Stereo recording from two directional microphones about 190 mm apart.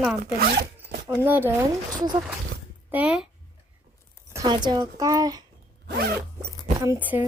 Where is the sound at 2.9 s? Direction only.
5° right (ahead or behind).